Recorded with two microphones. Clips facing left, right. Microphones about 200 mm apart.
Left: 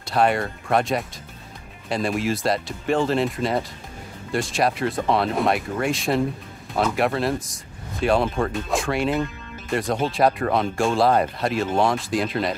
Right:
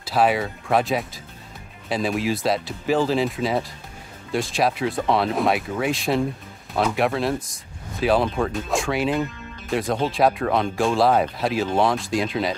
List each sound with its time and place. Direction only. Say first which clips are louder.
0.0 s speech: even; centre (ahead or behind)